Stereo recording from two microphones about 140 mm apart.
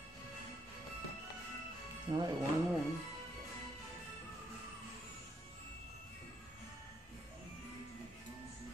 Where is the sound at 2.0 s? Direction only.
30° right (ahead or behind).